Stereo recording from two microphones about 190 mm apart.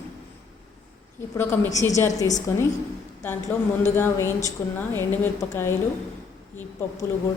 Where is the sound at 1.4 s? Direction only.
15° left (ahead or behind).